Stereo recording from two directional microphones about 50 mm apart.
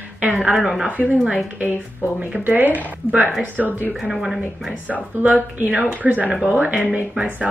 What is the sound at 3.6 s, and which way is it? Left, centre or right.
Speech, centre.